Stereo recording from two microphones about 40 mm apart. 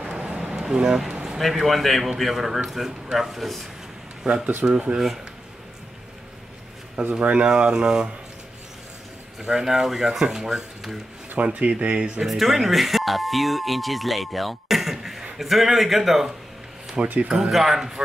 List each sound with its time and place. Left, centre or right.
0.0 s a sound: centre
0.6 s speech: centre
1.5 s a man's voice: centre
4.6 s speech: right
7.0 s speech: right
9.4 s a man's voice: centre
11.3 s speech: right
12.3 s a man's voice: centre
17.0 s speech: centre
17.3 s a man's voice: centre